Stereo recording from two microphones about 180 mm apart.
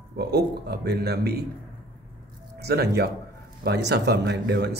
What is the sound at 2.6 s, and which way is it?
Speech, 60° right (ahead or behind).